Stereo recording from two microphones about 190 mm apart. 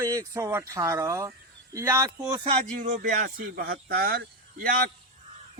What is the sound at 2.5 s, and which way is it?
Speech, 40° right (ahead or behind).